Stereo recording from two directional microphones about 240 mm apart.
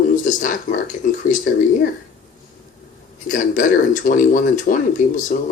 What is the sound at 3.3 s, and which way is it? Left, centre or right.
Speech, left.